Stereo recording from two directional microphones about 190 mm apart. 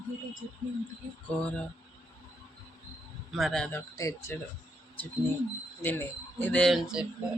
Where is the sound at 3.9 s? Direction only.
15° left (ahead or behind).